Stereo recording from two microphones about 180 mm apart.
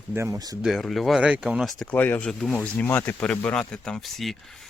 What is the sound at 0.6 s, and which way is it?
Speech, centre (ahead or behind).